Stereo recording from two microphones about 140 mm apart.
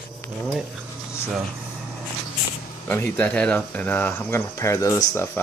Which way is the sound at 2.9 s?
10° left (ahead or behind).